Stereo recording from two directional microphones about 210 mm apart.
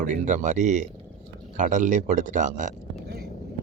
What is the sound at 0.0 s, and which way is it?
Speech, 35° right (ahead or behind).